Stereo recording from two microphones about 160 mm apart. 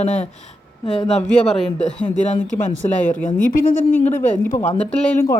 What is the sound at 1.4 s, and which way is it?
Speech, 5° left (ahead or behind).